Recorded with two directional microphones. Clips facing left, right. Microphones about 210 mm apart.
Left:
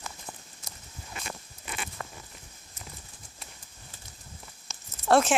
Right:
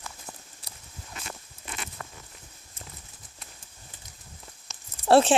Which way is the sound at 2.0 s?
10° left (ahead or behind).